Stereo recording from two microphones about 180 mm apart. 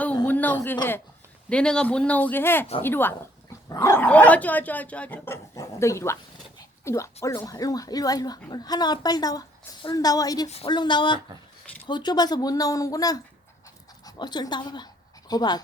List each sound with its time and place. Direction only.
0.3 s speech: 10° left (ahead or behind)